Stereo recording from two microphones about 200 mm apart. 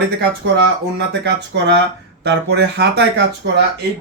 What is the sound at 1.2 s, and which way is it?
Speech, 60° right (ahead or behind).